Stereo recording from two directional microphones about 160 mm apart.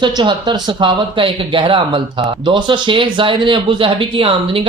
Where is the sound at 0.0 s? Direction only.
30° right (ahead or behind).